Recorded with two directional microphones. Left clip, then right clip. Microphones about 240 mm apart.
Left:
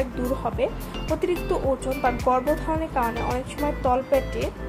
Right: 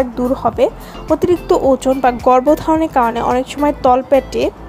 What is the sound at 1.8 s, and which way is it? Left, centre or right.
Speech, right.